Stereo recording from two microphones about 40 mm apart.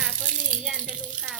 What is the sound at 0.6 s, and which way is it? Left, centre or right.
Rattle, centre.